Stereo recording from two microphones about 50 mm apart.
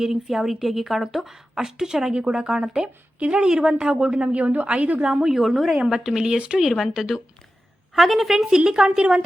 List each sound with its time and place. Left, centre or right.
0.0 s a woman's voice: centre
3.2 s a woman's voice: right
3.4 s a woman's voice: centre
5.0 s a woman's voice: centre
6.6 s a woman's voice: centre; by 9.2 s right